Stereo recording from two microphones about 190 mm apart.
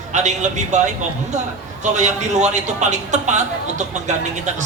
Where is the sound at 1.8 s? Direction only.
40° right (ahead or behind).